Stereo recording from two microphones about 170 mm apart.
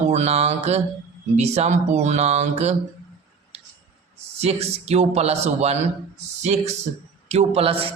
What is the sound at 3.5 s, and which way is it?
Scissors, 35° right (ahead or behind).